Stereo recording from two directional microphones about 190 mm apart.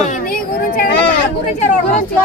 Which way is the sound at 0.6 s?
50° left (ahead or behind).